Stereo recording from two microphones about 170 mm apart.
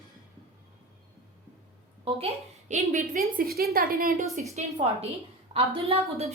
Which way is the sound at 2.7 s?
50° right (ahead or behind).